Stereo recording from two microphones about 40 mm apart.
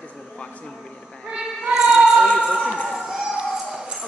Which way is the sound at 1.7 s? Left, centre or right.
Centre.